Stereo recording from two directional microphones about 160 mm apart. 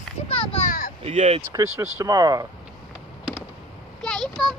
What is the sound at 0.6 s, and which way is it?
Speech, 60° left (ahead or behind).